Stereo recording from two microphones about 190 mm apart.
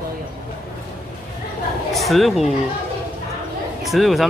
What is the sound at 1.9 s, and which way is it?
Speech, centre (ahead or behind).